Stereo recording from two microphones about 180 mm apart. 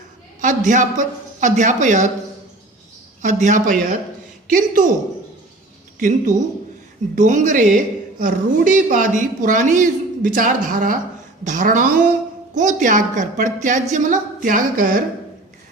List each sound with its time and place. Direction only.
0.4 s a man's voice: 45° right (ahead or behind)
3.2 s a woman's voice: 40° right (ahead or behind)
6.0 s a woman's voice: 45° right (ahead or behind)